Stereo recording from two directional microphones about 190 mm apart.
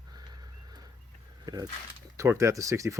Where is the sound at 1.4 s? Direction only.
20° right (ahead or behind).